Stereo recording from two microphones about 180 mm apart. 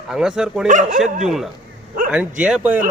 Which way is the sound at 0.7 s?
45° right (ahead or behind).